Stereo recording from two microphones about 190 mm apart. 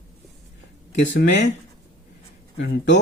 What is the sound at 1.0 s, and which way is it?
Speech, 65° left (ahead or behind).